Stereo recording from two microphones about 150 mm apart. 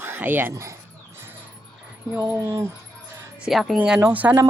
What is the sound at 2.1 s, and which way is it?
Speech, 20° right (ahead or behind).